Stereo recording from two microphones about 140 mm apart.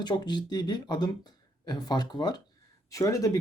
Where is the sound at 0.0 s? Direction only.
30° left (ahead or behind).